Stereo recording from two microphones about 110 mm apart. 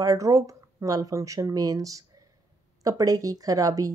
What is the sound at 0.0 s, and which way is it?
A woman's voice, 35° right (ahead or behind).